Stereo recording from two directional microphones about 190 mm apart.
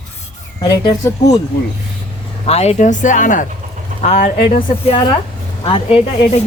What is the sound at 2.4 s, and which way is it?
Speech, 35° left (ahead or behind).